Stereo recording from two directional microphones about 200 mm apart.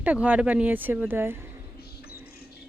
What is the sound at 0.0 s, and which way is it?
Speech, 10° right (ahead or behind).